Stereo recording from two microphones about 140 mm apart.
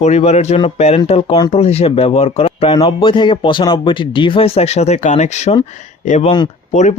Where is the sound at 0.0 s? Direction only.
50° left (ahead or behind).